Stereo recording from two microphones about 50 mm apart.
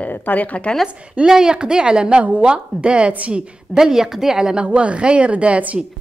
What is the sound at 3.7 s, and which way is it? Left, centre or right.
A woman's voice, centre.